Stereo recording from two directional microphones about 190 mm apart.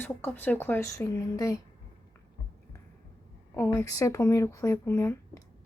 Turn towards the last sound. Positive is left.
turn(degrees=15)  # may be behind; listen again after turning